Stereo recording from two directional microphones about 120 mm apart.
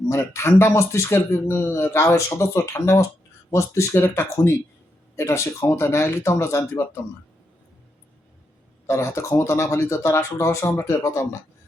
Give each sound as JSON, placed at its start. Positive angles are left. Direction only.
{"t": 0.1, "sound": "speech", "side_deg": 25}
{"t": 8.9, "sound": "speech", "side_deg": 25}